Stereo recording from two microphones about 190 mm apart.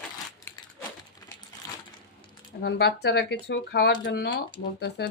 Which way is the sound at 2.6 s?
60° left (ahead or behind).